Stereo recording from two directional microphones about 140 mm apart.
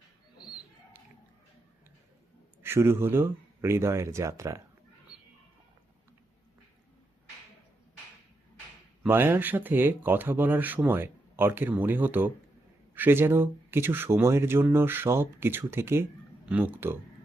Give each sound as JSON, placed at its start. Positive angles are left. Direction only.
{"t": 2.6, "sound": "speech", "side_deg": -15}
{"t": 9.0, "sound": "speech", "side_deg": -15}